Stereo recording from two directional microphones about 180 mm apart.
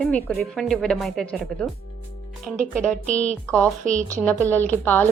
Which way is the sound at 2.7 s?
5° left (ahead or behind).